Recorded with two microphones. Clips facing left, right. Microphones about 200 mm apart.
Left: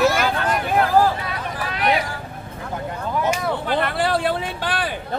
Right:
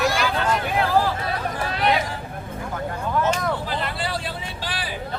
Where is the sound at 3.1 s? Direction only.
10° left (ahead or behind).